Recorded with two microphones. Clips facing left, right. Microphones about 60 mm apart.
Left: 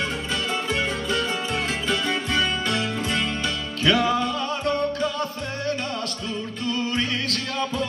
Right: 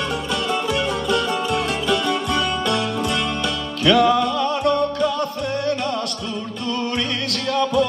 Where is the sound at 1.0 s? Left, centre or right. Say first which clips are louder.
Right 5 dB; right.